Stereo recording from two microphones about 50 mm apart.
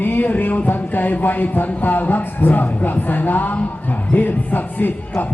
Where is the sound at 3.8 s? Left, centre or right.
Left.